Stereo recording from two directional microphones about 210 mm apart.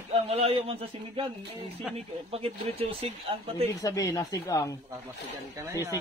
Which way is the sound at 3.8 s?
15° left (ahead or behind).